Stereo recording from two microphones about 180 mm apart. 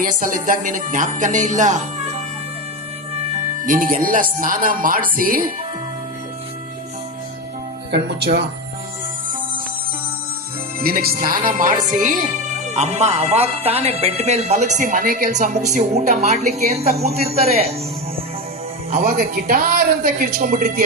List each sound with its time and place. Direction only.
0.0 s music: 50° right (ahead or behind)
3.7 s music: 50° right (ahead or behind)
7.9 s speech: 70° right (ahead or behind)
10.8 s music: 55° right (ahead or behind)
11.9 s a woman's voice: 45° right (ahead or behind)
18.9 s speech: 55° right (ahead or behind)